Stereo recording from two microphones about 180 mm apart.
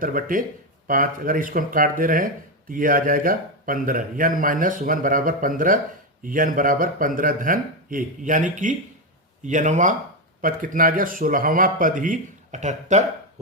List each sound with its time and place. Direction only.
0.0 s speech: 50° right (ahead or behind)